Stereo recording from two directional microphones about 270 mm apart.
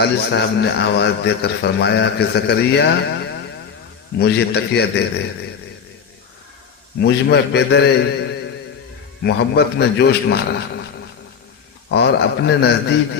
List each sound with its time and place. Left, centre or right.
0.0 s a man's voice: left
4.2 s a man's voice: left
7.0 s a man's voice: left
11.9 s a man's voice: left